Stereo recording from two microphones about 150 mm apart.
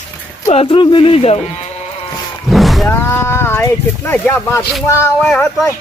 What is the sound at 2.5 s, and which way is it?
Roaring cats, centre (ahead or behind).